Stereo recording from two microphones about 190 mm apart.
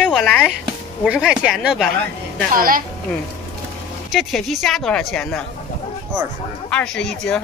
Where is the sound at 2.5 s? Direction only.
50° right (ahead or behind).